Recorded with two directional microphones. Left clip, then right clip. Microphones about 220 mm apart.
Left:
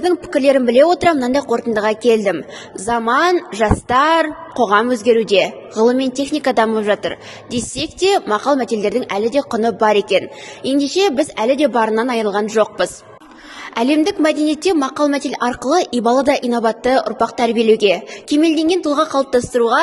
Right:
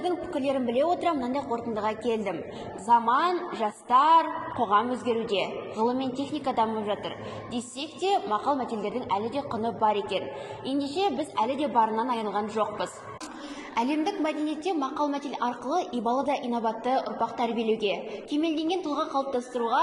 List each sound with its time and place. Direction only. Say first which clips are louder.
0.0 s a woman's voice: left 14 dB; 45° left (ahead or behind)